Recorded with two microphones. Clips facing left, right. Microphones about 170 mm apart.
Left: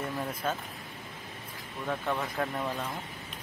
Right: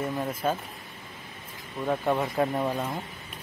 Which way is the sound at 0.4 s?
10° right (ahead or behind).